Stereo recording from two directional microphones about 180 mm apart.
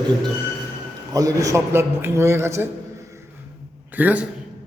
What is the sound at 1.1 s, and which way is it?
A man's voice, 20° right (ahead or behind).